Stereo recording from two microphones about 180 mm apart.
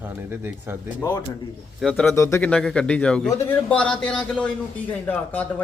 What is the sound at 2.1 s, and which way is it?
A man's voice, 15° left (ahead or behind).